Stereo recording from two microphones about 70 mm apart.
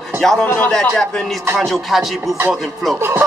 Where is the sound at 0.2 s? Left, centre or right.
Centre.